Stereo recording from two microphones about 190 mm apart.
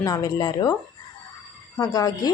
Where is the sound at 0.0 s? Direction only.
20° left (ahead or behind).